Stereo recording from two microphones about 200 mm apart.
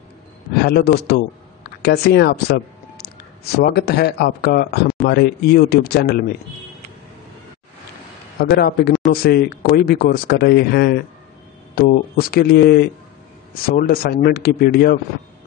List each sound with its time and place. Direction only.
0.6 s speech: 50° left (ahead or behind)
8.4 s speech: 50° left (ahead or behind)